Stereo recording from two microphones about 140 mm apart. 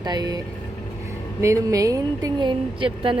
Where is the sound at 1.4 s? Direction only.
20° right (ahead or behind).